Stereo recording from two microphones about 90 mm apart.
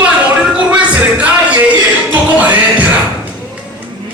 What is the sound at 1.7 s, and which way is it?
Music, 20° right (ahead or behind).